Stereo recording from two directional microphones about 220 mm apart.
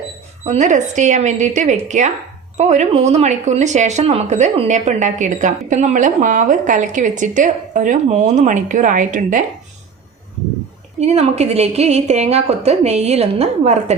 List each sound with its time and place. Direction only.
0.4 s speech: 30° right (ahead or behind)
11.0 s a woman's voice: 30° right (ahead or behind)